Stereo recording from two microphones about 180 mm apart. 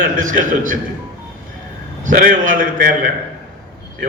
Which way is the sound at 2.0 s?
50° right (ahead or behind).